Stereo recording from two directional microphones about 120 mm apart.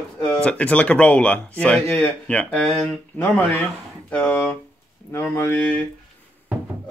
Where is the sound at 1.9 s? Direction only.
20° left (ahead or behind).